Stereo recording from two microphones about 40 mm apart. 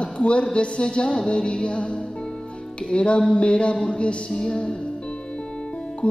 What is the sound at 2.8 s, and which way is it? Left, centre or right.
Music, left.